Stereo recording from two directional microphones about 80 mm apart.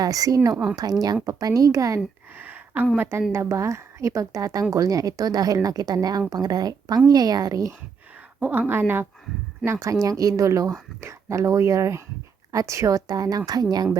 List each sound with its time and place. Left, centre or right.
0.0 s speech: right
2.4 s a sound: right
3.3 s speech: right
8.4 s speech: right
9.8 s speech: right